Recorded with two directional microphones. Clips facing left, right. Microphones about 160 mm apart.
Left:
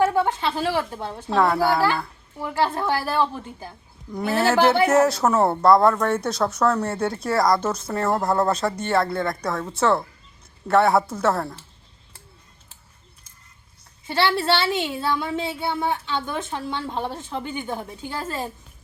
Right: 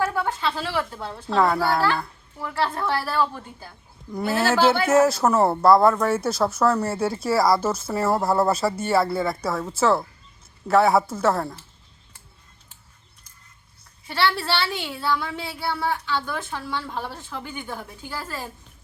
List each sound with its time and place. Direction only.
0.0 s a woman's voice: 20° left (ahead or behind)
1.3 s speech: centre (ahead or behind)
2.4 s a woman's voice: 20° left (ahead or behind)
4.1 s speech: centre (ahead or behind)
14.1 s a woman's voice: 20° left (ahead or behind)